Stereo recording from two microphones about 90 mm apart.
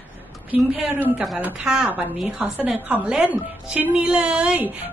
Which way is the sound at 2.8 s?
20° right (ahead or behind).